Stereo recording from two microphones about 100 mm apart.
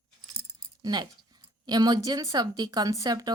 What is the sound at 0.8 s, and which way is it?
A woman's voice, 45° right (ahead or behind).